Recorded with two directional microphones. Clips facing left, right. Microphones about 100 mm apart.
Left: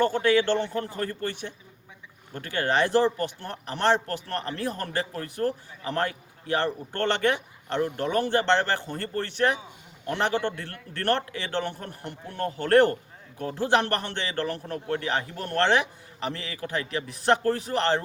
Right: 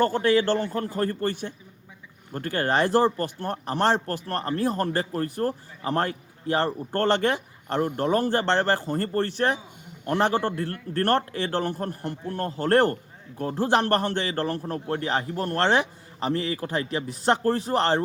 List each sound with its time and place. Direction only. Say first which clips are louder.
0.0 s a man's voice: right 1 dB; 40° right (ahead or behind)